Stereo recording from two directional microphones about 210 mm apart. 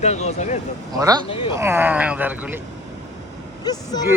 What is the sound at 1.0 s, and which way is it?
Speech, 15° right (ahead or behind).